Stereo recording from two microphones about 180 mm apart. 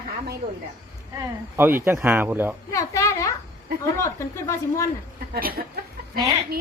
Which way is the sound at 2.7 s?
15° left (ahead or behind).